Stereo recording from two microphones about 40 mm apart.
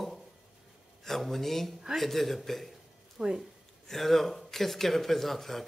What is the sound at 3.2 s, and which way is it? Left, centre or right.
Speech, right.